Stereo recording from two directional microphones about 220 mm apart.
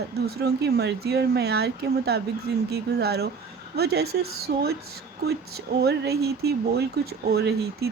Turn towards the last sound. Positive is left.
turn(degrees=-45)  # may be behind; listen again after turning